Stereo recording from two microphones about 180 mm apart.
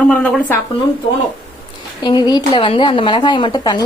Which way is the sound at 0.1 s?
5° left (ahead or behind).